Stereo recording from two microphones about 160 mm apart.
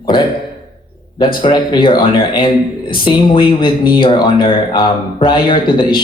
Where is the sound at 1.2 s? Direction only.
30° left (ahead or behind).